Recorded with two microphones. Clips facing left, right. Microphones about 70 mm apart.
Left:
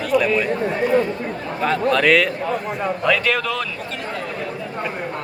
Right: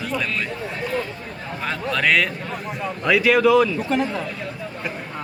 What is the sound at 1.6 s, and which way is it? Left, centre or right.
A man's voice, centre.